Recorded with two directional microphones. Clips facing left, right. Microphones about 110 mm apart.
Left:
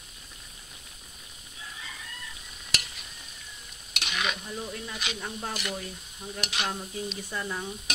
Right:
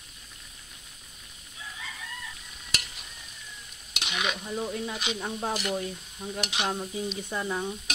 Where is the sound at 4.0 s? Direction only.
15° right (ahead or behind).